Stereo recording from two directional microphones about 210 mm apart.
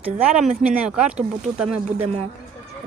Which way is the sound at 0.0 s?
5° right (ahead or behind).